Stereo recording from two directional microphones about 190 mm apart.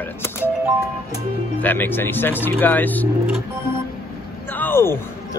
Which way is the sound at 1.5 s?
10° left (ahead or behind).